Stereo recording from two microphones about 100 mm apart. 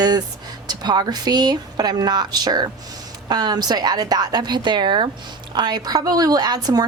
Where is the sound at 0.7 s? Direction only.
45° right (ahead or behind).